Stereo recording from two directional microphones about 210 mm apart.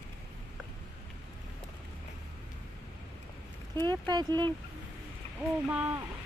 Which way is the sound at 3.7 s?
20° right (ahead or behind).